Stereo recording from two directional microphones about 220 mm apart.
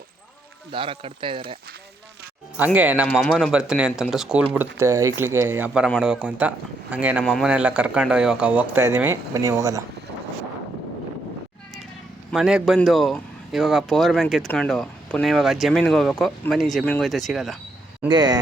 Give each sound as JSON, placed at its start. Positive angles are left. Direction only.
{"t": 0.7, "sound": "speech", "side_deg": -25}
{"t": 2.6, "sound": "speech", "side_deg": -5}
{"t": 4.8, "sound": "speech", "side_deg": -15}
{"t": 12.3, "sound": "speech", "side_deg": -5}
{"t": 18.1, "sound": "speech", "side_deg": -20}